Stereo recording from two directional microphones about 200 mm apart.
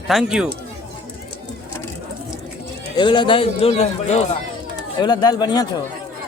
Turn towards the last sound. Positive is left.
turn(degrees=20)  # may be behind; listen again after turning